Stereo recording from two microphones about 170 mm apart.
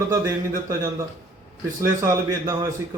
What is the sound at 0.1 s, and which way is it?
Speech, 20° right (ahead or behind).